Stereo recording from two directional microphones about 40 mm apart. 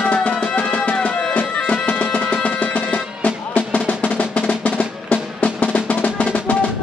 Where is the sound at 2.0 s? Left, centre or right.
Left.